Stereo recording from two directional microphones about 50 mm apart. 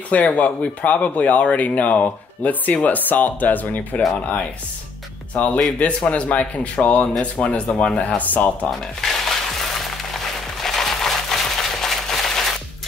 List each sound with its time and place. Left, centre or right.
0.1 s speech: left
5.3 s speech: left
8.6 s music: centre
10.6 s a sound: centre